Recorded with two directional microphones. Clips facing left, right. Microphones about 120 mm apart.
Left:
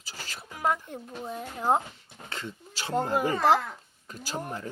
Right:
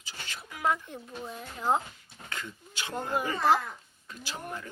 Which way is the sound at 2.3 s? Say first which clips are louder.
Left 2 dB; 30° left (ahead or behind).